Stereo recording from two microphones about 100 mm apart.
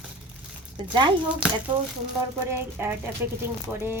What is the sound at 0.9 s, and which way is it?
Speech, 50° right (ahead or behind).